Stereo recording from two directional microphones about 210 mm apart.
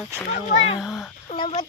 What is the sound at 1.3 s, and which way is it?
Speech, 30° left (ahead or behind).